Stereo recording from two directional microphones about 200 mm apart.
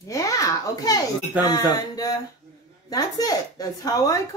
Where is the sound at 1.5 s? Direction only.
20° left (ahead or behind).